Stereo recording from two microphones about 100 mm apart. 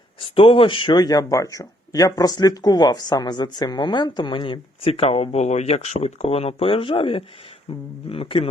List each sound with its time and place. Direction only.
0.2 s speech: 60° left (ahead or behind)
0.9 s speech: 35° left (ahead or behind); by 8.4 s 70° left (ahead or behind)